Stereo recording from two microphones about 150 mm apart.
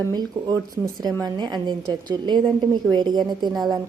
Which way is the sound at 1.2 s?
30° right (ahead or behind).